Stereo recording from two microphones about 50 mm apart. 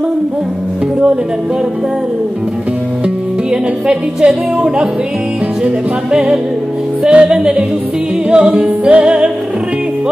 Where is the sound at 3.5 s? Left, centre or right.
Centre.